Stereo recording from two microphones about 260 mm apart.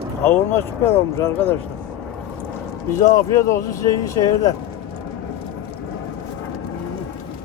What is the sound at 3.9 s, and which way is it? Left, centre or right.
Speech, centre.